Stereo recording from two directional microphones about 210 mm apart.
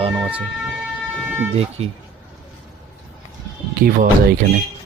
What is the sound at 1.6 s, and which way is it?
Speech, 30° right (ahead or behind).